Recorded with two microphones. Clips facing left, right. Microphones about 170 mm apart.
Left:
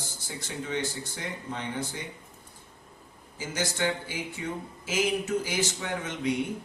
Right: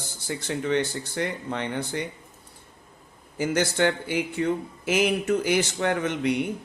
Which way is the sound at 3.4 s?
65° right (ahead or behind).